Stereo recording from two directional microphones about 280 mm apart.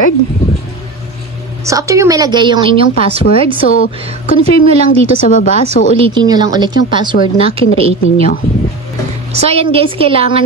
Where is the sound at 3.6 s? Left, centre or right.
Left.